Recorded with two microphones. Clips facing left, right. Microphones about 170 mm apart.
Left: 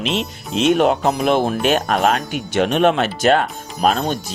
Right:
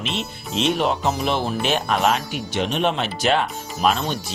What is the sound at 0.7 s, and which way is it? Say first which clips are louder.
Speech: left 7 dB; 55° left (ahead or behind).